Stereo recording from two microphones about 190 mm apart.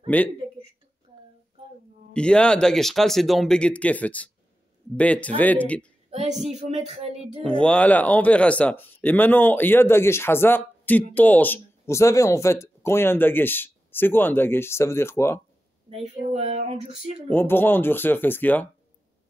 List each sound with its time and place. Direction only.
0.0 s a sound: 10° left (ahead or behind)
2.1 s speech: 5° left (ahead or behind)
6.0 s a sound: 35° right (ahead or behind)
6.5 s speech: 35° right (ahead or behind)
7.4 s speech: 5° left (ahead or behind)
15.9 s speech: 30° right (ahead or behind)
17.3 s speech: 10° left (ahead or behind)